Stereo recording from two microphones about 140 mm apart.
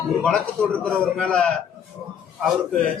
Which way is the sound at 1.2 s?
5° left (ahead or behind).